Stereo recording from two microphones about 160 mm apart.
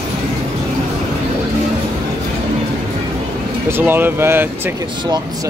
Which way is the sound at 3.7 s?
15° right (ahead or behind).